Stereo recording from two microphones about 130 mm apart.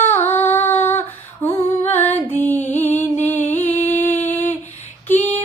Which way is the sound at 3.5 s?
15° left (ahead or behind).